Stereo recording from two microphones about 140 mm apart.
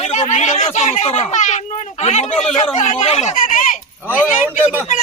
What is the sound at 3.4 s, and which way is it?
Speech, 70° left (ahead or behind).